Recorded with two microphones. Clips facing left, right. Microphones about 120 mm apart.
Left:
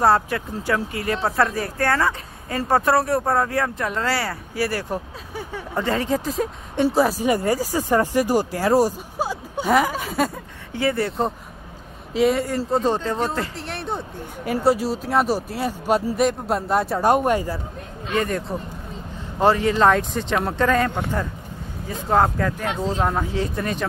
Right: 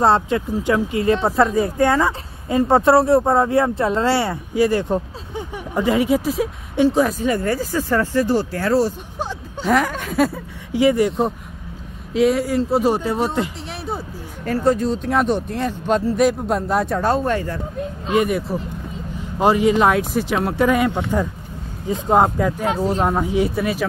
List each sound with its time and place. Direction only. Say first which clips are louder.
0.0 s speech: right 2 dB; 25° right (ahead or behind); by 10.4 s centre (ahead or behind)
10.7 s speech: right 6 dB; 15° right (ahead or behind)
12.1 s speech: right 2 dB; centre (ahead or behind)
13.7 s a sound: even; centre (ahead or behind)
14.4 s speech: right 2 dB; 10° left (ahead or behind)
17.0 s speech: left 1 dB; 15° left (ahead or behind)
18.1 s speech: right 4 dB; 10° right (ahead or behind)